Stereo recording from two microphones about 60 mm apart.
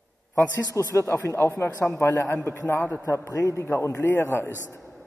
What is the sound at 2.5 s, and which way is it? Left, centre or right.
A man's voice, left.